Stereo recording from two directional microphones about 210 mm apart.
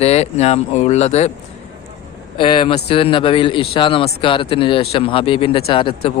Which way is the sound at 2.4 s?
25° left (ahead or behind).